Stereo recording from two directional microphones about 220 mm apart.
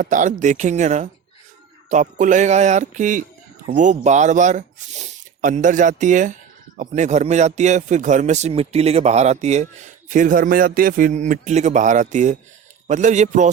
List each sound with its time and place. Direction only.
0.0 s speech: 35° right (ahead or behind)